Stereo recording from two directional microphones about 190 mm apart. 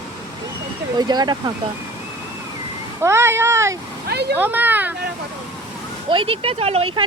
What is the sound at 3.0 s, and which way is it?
Speech, 15° right (ahead or behind).